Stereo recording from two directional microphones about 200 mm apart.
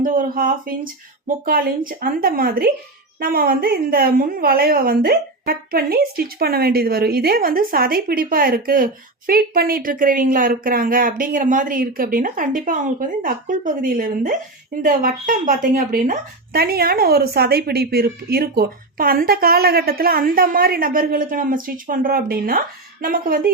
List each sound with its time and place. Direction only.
0.0 s a woman's voice: 45° right (ahead or behind)